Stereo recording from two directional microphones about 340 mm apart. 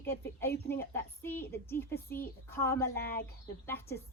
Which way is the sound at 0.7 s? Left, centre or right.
Centre.